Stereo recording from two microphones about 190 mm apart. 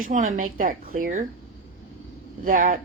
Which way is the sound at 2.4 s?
45° right (ahead or behind).